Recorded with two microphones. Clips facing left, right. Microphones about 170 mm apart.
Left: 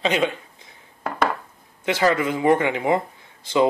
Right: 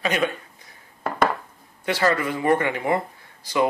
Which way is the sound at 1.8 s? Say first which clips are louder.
Left 2 dB; 15° left (ahead or behind).